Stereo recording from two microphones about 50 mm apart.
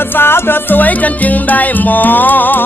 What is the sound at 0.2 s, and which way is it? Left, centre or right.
Music, left.